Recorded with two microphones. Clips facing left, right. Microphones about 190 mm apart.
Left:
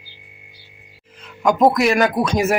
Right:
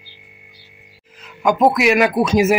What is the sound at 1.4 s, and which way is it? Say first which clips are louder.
Speech: even; 5° right (ahead or behind).